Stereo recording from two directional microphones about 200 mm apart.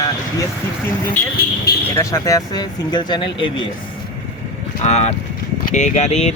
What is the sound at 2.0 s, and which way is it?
Speech, 15° left (ahead or behind).